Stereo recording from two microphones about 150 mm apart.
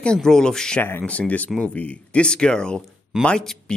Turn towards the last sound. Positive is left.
turn(degrees=5)  # may be behind; listen again after turning